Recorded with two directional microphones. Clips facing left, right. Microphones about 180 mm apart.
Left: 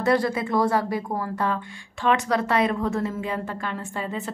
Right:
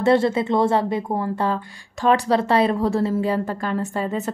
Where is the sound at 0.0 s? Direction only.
25° right (ahead or behind).